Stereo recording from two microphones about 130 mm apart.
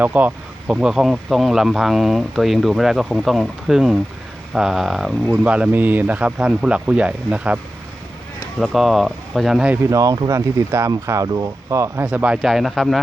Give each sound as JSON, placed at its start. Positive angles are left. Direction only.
{"t": 0.0, "sound": "speech", "side_deg": -10}
{"t": 9.9, "sound": "speech", "side_deg": -25}
{"t": 12.0, "sound": "speech", "side_deg": -5}